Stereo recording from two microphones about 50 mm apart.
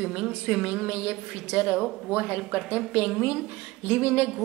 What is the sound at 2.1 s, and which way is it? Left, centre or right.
Speech, right.